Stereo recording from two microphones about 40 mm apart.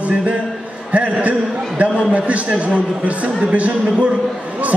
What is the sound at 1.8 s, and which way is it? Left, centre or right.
Speech, right.